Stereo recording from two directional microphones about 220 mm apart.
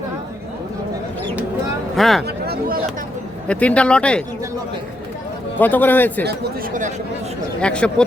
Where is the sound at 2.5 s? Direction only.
40° right (ahead or behind).